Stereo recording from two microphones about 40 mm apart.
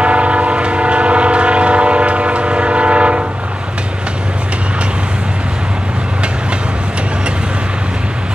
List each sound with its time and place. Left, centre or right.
0.0 s train: right